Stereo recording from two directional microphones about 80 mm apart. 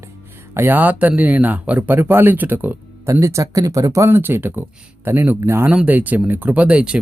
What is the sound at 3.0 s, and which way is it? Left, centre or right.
Speech, right.